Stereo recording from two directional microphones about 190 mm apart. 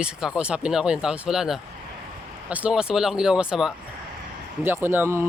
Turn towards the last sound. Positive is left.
turn(degrees=-15)  # may be behind; listen again after turning